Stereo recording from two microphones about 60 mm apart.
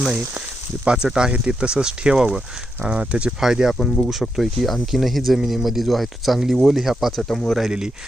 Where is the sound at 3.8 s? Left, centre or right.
Centre.